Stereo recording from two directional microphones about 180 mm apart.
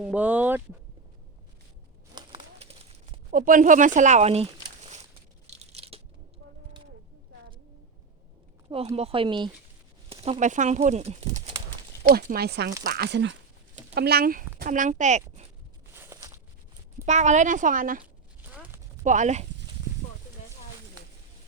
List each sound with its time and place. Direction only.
0.0 s speech: 10° right (ahead or behind)
2.1 s bird: 30° right (ahead or behind)
3.3 s speech: 50° right (ahead or behind)
5.5 s a sound: 35° right (ahead or behind)
8.7 s speech: 35° right (ahead or behind)
10.1 s a sound: 35° right (ahead or behind)
10.4 s speech: 45° right (ahead or behind)
12.0 s speech: 55° right (ahead or behind); by 13.3 s 75° right (ahead or behind)
13.9 s speech: 60° right (ahead or behind); by 15.4 s 40° right (ahead or behind)
15.9 s a sound: 15° right (ahead or behind)
17.1 s speech: 40° right (ahead or behind)
18.5 s clip-clop: 10° right (ahead or behind)
19.0 s speech: 45° right (ahead or behind)